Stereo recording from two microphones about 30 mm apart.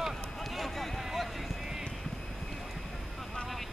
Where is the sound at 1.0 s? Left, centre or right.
Centre.